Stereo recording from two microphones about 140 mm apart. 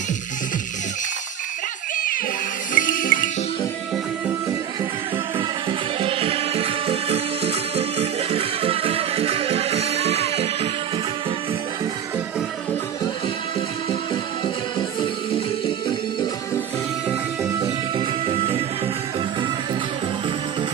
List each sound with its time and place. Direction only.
2.7 s music: 75° left (ahead or behind)
5.7 s music: 40° right (ahead or behind)
17.9 s music: 45° right (ahead or behind)